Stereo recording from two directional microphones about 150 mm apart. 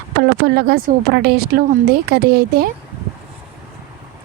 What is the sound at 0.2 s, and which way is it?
Speech, 90° right.